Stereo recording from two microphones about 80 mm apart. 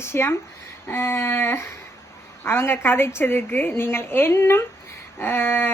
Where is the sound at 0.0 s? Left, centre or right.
Left.